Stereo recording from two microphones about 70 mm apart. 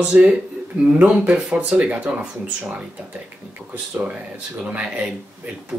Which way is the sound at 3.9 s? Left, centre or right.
Centre.